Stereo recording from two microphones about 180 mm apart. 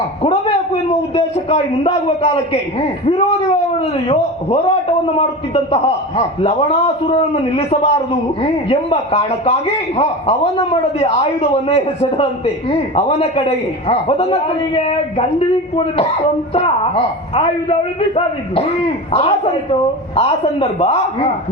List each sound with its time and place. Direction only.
0.2 s a sound: 30° left (ahead or behind)
3.8 s a man's voice: 35° left (ahead or behind)
16.6 s a man's voice: 35° left (ahead or behind)